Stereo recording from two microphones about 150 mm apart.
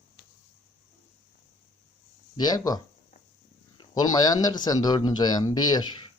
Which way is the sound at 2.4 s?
25° left (ahead or behind).